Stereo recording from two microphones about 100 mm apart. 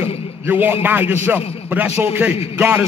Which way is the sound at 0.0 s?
20° right (ahead or behind).